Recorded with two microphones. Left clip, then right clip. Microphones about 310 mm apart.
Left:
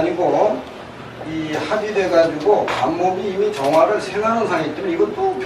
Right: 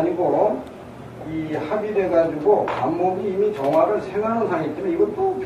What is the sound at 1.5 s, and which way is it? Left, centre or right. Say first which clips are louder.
A man's voice: left 3 dB; centre.